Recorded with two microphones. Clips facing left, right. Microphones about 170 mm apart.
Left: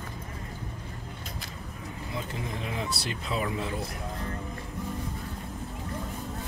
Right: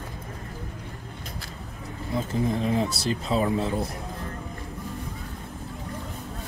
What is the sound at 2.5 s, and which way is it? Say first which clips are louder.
Speech: right 8 dB; 35° right (ahead or behind).